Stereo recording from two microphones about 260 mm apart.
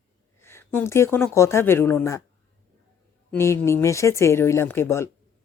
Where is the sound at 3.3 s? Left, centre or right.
Centre.